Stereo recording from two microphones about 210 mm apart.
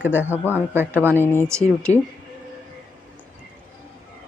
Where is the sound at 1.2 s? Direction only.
10° left (ahead or behind).